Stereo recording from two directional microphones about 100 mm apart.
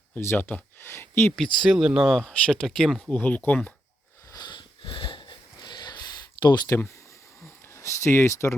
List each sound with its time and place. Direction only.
0.1 s speech: 20° left (ahead or behind)
1.4 s speech: centre (ahead or behind)
3.2 s speech: 15° left (ahead or behind)
4.3 s wheeze: 45° left (ahead or behind)
5.6 s snort: 50° left (ahead or behind)
6.4 s speech: 50° left (ahead or behind)
6.7 s speech: 30° left (ahead or behind)
7.4 s a sound: 30° left (ahead or behind)